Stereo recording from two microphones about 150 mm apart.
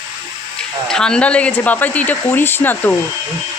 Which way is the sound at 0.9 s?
5° left (ahead or behind).